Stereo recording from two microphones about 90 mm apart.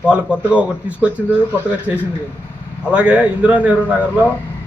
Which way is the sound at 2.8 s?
15° right (ahead or behind).